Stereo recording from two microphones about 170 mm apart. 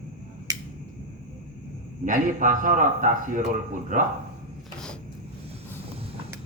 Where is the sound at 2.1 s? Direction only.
50° right (ahead or behind).